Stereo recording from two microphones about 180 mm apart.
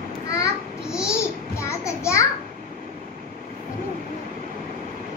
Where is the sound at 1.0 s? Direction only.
15° left (ahead or behind).